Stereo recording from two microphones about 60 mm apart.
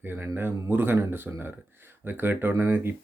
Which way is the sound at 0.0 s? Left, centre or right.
Right.